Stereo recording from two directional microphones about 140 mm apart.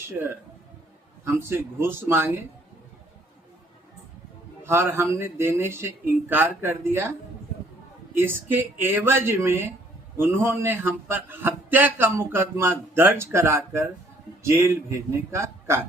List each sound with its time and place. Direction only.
0.1 s a man's voice: 15° right (ahead or behind)
4.6 s a man's voice: 15° right (ahead or behind)
8.1 s a man's voice: 15° right (ahead or behind)